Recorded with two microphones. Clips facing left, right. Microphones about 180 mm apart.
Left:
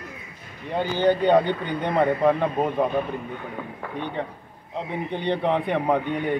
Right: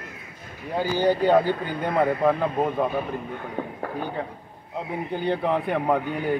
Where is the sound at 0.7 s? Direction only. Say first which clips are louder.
Left 1 dB; 10° right (ahead or behind).